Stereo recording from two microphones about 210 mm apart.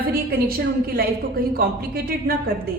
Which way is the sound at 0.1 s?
45° right (ahead or behind).